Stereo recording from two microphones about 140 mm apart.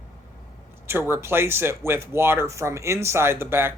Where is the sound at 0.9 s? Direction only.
15° right (ahead or behind).